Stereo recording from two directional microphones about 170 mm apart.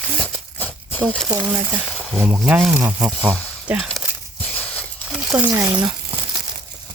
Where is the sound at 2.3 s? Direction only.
15° right (ahead or behind).